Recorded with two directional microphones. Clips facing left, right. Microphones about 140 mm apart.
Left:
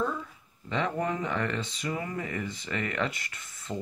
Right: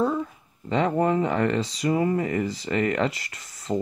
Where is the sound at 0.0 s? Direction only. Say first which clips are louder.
Right 7 dB; 40° right (ahead or behind).